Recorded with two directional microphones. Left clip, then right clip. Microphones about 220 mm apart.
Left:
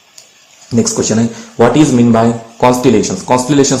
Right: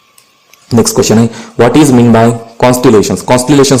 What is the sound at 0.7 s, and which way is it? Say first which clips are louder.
Speech: right 6 dB; 45° right (ahead or behind).